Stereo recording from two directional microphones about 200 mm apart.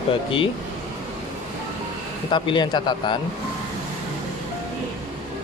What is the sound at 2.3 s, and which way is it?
Speech, 25° left (ahead or behind).